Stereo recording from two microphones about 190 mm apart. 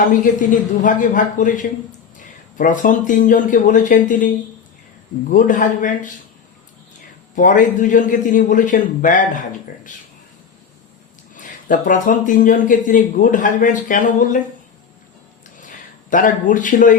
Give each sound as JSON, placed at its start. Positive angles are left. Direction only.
{"t": 0.1, "sound": "a man's voice", "side_deg": 45}
{"t": 5.3, "sound": "a man's voice", "side_deg": 45}
{"t": 7.3, "sound": "a man's voice", "side_deg": 45}
{"t": 11.3, "sound": "a man's voice", "side_deg": 45}
{"t": 15.6, "sound": "speech", "side_deg": 45}